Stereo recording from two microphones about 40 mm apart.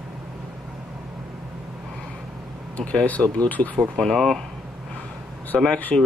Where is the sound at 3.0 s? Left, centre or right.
Left.